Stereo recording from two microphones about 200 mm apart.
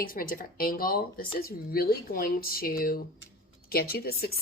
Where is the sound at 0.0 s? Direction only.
45° left (ahead or behind).